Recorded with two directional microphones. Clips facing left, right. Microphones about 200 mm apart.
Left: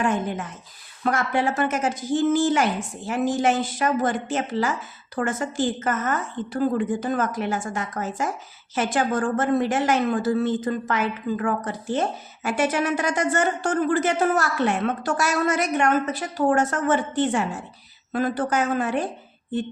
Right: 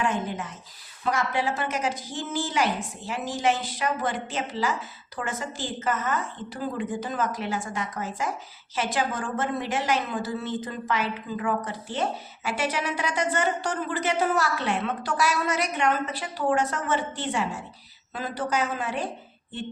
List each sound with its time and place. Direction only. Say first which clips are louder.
0.0 s a woman's voice: left 4 dB; 50° left (ahead or behind)